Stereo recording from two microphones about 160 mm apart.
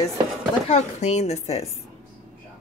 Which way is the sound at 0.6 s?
45° left (ahead or behind).